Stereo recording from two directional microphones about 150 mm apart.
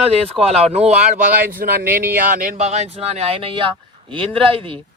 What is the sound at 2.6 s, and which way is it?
Speech, 45° right (ahead or behind).